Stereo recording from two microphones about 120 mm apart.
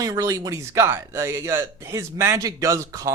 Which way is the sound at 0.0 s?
30° right (ahead or behind).